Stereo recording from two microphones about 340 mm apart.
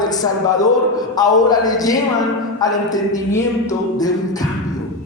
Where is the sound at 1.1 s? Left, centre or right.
Centre.